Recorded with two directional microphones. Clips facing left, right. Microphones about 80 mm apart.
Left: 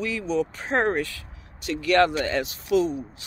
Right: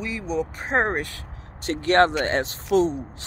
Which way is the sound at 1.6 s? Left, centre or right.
Right.